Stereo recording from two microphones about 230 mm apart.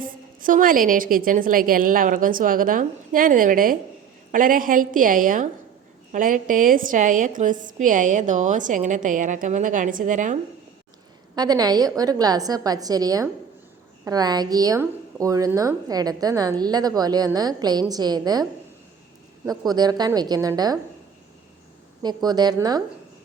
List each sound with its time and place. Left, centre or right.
0.0 s a woman's voice: right
11.3 s a woman's voice: centre
19.5 s a woman's voice: centre
22.0 s a woman's voice: centre